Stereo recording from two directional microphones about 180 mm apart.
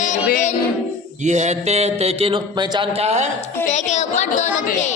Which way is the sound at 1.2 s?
40° right (ahead or behind).